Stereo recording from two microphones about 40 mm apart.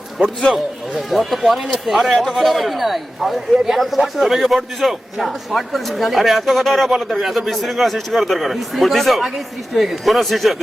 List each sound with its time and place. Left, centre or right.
0.9 s a man's voice: centre